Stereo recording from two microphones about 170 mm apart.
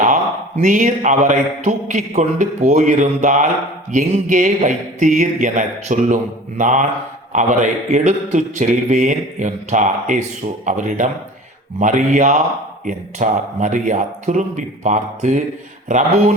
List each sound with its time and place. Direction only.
0.0 s speech: 45° right (ahead or behind)